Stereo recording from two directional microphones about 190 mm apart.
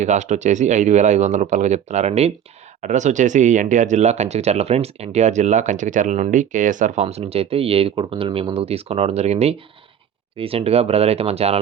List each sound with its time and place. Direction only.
0.0 s speech: 40° right (ahead or behind)